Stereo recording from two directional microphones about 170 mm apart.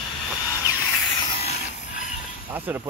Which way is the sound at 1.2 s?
35° left (ahead or behind).